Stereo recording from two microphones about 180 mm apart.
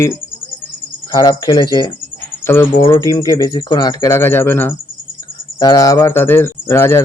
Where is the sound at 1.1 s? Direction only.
20° left (ahead or behind).